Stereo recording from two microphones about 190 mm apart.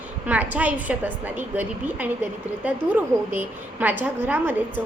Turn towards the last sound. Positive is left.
turn(degrees=-10)  # may be behind; listen again after turning